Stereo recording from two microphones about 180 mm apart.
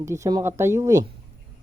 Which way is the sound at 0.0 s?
15° right (ahead or behind).